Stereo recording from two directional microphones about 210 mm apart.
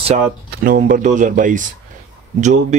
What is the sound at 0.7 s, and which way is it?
Speech, 40° right (ahead or behind).